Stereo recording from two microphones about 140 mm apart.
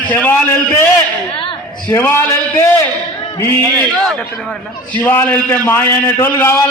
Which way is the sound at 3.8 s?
5° left (ahead or behind).